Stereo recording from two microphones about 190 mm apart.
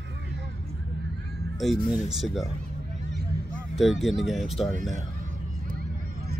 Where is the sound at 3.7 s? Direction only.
Centre (ahead or behind).